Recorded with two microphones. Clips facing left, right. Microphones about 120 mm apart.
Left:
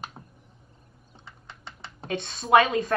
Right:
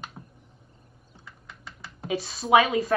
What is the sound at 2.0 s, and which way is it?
Speech, 5° right (ahead or behind).